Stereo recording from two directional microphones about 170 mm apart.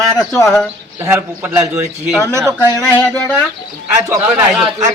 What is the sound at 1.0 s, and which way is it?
Speech, 10° right (ahead or behind).